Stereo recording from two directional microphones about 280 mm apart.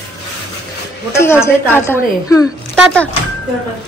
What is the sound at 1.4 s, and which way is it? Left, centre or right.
A woman's voice, centre.